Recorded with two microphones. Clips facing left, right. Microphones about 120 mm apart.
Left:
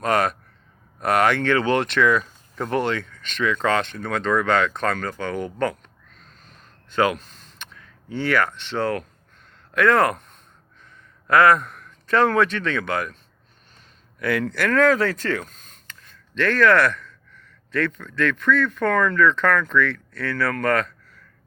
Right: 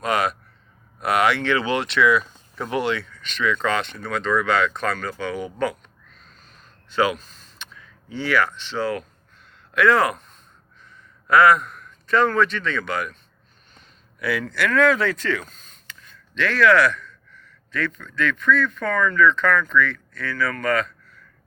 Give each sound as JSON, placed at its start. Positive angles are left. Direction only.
{"t": 0.0, "sound": "speech", "side_deg": 50}
{"t": 6.9, "sound": "a man's voice", "side_deg": 50}
{"t": 14.2, "sound": "speech", "side_deg": 50}